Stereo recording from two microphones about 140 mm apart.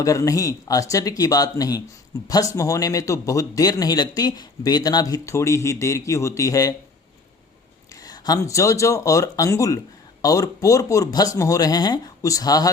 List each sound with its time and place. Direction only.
0.0 s speech: 25° left (ahead or behind)
7.9 s speech: 25° left (ahead or behind)